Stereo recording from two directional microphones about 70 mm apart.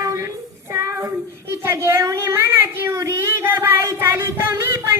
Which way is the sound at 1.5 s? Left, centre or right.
Right.